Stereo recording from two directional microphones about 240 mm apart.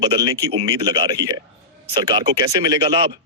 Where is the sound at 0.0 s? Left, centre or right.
Centre.